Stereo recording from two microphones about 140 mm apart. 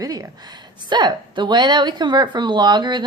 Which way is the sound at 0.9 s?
30° right (ahead or behind).